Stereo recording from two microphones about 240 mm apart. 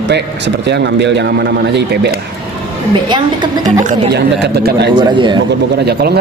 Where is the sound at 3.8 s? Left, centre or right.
Right.